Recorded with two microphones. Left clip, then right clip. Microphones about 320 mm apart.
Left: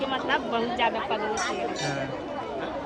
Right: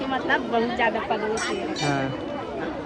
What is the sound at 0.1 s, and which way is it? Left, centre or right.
Speech, centre.